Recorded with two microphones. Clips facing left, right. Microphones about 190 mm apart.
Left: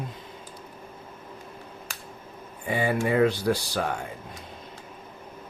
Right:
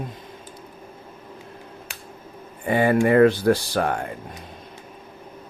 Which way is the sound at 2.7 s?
60° right (ahead or behind).